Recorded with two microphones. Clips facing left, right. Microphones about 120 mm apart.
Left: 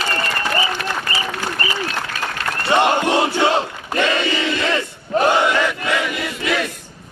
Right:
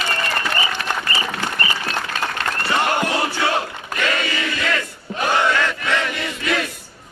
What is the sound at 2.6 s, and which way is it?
Battle cry, 20° left (ahead or behind).